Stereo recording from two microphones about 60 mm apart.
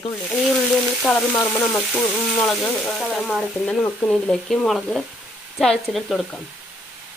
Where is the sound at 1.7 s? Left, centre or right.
Centre.